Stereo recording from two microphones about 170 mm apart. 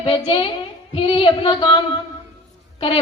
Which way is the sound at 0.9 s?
30° left (ahead or behind).